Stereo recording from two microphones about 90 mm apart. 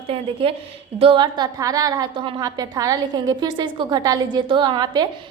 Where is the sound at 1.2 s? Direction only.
55° right (ahead or behind).